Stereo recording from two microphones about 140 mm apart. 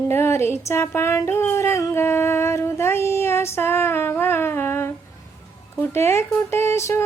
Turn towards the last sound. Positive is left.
turn(degrees=20)  # may be behind; listen again after turning